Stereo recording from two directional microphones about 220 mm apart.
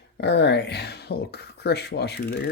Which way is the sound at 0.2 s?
50° left (ahead or behind).